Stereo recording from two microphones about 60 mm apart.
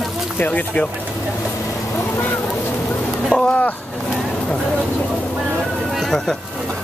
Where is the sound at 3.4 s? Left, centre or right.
Centre.